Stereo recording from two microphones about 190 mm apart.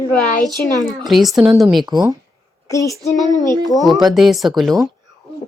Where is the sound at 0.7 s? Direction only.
20° right (ahead or behind).